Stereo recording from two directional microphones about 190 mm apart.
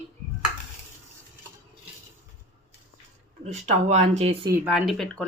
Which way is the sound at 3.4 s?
35° right (ahead or behind).